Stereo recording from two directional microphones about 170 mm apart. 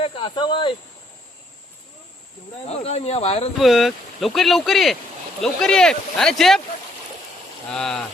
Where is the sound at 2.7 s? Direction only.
40° left (ahead or behind).